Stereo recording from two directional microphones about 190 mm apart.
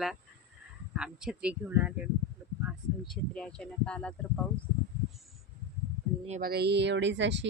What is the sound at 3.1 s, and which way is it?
Speech, 5° left (ahead or behind).